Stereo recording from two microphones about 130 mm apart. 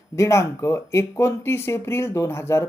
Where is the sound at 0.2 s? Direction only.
25° left (ahead or behind).